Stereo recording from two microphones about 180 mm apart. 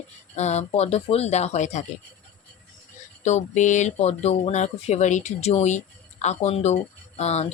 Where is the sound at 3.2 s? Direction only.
40° left (ahead or behind).